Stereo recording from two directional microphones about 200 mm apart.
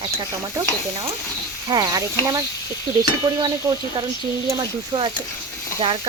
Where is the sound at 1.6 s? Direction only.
20° right (ahead or behind).